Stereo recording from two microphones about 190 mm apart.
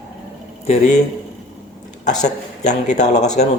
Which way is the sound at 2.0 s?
40° left (ahead or behind).